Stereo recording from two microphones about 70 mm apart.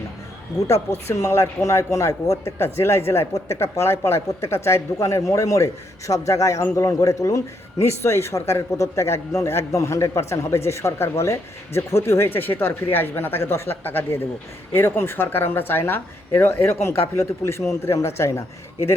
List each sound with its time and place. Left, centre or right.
0.7 s a man's voice: left
2.4 s a man's voice: left